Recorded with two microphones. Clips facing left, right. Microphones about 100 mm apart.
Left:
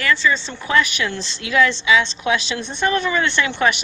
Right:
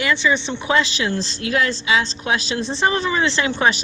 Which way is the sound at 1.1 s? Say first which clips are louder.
Right 2 dB; 35° right (ahead or behind).